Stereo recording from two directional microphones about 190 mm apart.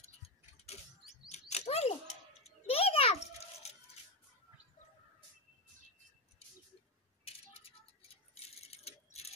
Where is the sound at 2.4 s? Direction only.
30° left (ahead or behind).